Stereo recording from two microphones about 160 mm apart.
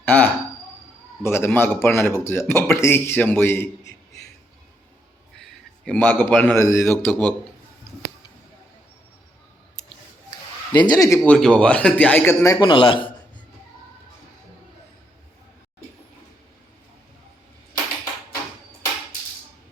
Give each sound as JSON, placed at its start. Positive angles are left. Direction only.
{"t": 0.0, "sound": "a man's voice", "side_deg": 10}
{"t": 5.4, "sound": "a sound", "side_deg": 10}
{"t": 6.6, "sound": "a man's voice", "side_deg": 20}
{"t": 10.7, "sound": "speech", "side_deg": 25}
{"t": 11.3, "sound": "a man's voice", "side_deg": 5}
{"t": 12.5, "sound": "a man's voice", "side_deg": 30}